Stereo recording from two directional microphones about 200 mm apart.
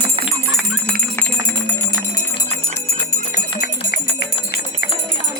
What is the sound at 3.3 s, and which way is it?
Music, 50° left (ahead or behind).